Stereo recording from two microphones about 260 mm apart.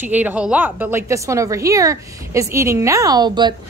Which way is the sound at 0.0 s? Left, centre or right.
Centre.